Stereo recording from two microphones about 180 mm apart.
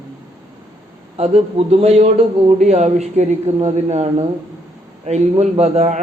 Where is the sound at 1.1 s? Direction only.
35° right (ahead or behind).